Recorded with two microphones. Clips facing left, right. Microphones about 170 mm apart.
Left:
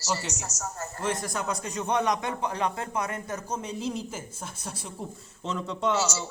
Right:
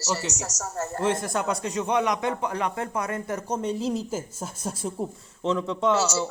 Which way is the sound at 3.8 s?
40° right (ahead or behind).